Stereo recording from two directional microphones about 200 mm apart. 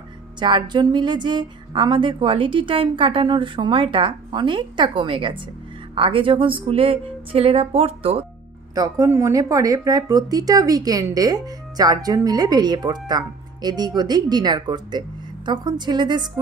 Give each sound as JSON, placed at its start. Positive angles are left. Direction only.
{"t": 0.4, "sound": "speech", "side_deg": -20}
{"t": 8.7, "sound": "speech", "side_deg": -15}